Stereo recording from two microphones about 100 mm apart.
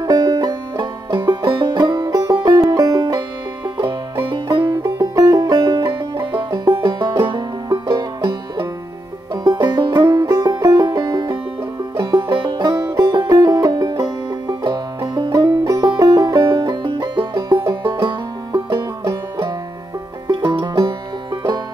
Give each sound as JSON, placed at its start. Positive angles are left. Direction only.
{"t": 0.0, "sound": "music", "side_deg": -40}
{"t": 4.3, "sound": "music", "side_deg": -45}
{"t": 5.8, "sound": "music", "side_deg": -30}
{"t": 6.3, "sound": "music", "side_deg": -50}
{"t": 10.0, "sound": "music", "side_deg": -35}
{"t": 17.3, "sound": "music", "side_deg": -40}
{"t": 20.2, "sound": "music", "side_deg": -55}